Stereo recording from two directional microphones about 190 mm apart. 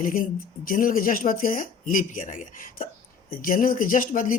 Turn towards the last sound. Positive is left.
turn(degrees=45)  # may be behind; listen again after turning